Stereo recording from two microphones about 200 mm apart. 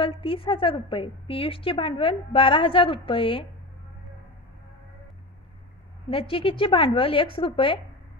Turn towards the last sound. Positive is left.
turn(degrees=25)  # may be behind; listen again after turning